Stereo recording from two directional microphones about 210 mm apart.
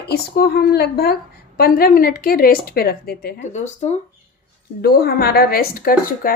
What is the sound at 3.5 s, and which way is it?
Speech, 35° left (ahead or behind).